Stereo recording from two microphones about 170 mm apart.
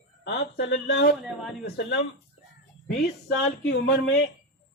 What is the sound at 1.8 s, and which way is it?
Speech, 65° left (ahead or behind).